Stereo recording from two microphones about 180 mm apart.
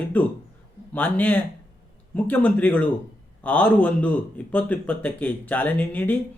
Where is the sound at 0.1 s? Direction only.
10° left (ahead or behind).